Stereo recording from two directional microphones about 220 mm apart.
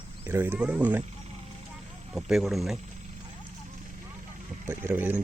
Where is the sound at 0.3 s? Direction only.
10° right (ahead or behind).